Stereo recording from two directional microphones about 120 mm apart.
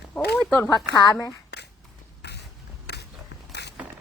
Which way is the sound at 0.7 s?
35° left (ahead or behind).